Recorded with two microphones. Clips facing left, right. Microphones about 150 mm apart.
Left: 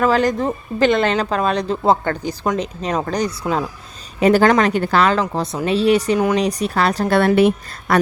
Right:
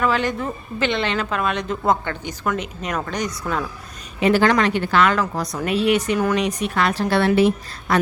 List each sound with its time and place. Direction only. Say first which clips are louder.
0.0 s speech: left 5 dB; 40° left (ahead or behind)
7.1 s a woman's voice: left 3 dB; 50° left (ahead or behind)